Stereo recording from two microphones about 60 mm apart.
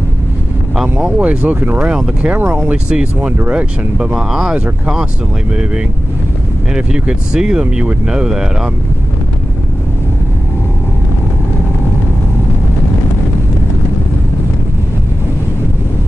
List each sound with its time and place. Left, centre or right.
1.0 s speech: centre
2.2 s speech: right
2.7 s speech: centre
3.3 s speech: right
4.0 s speech: centre